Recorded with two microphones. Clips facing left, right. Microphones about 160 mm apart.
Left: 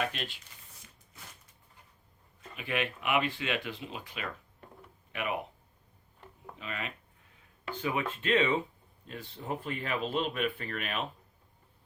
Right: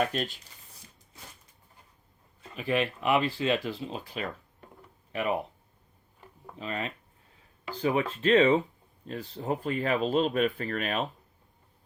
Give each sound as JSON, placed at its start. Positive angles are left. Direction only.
{"t": 0.0, "sound": "speech", "side_deg": -40}
{"t": 2.6, "sound": "speech", "side_deg": -35}
{"t": 6.6, "sound": "speech", "side_deg": -35}